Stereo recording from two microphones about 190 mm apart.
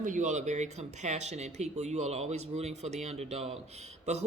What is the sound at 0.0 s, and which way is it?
Speech, 40° right (ahead or behind).